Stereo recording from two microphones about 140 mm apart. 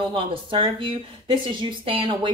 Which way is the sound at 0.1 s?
35° right (ahead or behind).